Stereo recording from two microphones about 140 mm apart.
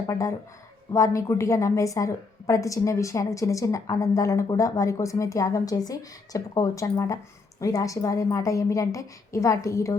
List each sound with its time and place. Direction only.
0.1 s a woman's voice: 25° left (ahead or behind)